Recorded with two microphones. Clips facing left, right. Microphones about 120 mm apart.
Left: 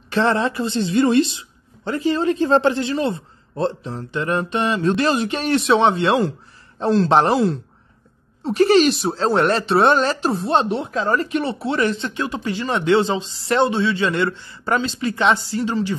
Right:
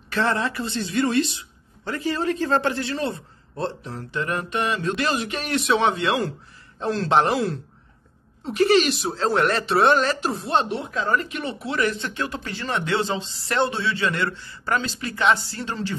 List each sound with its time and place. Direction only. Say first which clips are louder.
0.1 s speech: left 5 dB; 25° left (ahead or behind)